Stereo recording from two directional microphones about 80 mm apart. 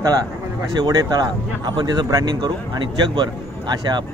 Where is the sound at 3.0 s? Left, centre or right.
Right.